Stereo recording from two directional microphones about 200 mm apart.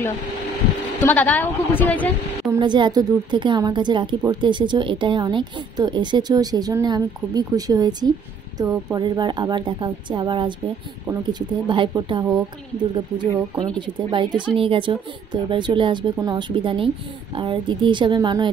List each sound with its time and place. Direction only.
1.0 s a woman's voice: 10° left (ahead or behind)
2.5 s speech: 25° right (ahead or behind)